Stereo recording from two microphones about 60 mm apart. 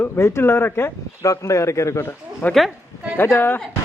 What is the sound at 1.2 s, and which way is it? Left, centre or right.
Speech, left.